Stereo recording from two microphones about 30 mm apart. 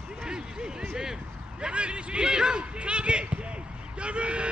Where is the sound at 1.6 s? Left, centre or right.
Right.